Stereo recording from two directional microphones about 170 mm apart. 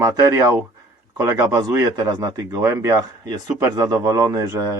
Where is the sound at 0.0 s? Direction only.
20° right (ahead or behind).